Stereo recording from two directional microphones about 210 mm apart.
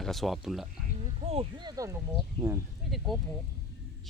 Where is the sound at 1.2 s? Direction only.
30° right (ahead or behind).